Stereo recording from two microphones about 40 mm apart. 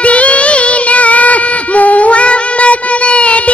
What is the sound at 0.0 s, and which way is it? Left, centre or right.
Child singing, left.